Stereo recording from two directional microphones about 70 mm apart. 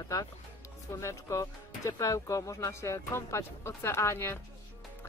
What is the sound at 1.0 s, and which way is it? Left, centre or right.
Speech, left.